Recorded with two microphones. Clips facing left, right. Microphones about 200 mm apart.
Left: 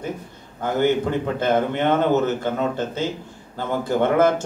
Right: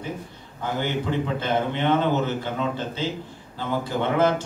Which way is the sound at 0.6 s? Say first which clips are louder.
Left 7 dB; 50° left (ahead or behind).